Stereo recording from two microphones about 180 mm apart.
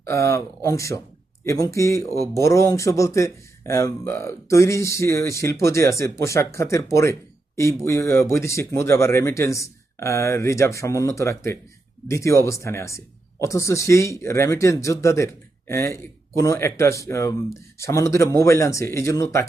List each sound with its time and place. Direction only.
0.0 s speech: 15° left (ahead or behind)